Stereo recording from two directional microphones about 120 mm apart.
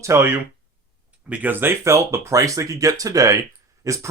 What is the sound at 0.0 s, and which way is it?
Speech, 20° right (ahead or behind).